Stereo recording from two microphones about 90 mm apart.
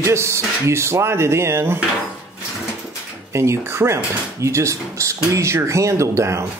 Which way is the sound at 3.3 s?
30° right (ahead or behind).